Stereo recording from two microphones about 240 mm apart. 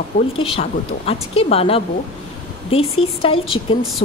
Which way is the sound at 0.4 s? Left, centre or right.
Left.